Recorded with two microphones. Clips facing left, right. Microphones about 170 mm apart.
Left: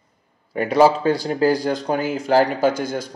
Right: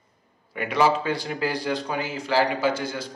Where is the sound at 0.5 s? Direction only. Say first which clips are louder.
Left 6 dB; 40° left (ahead or behind).